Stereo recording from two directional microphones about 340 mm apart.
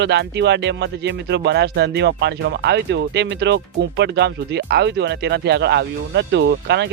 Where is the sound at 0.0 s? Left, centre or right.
Right.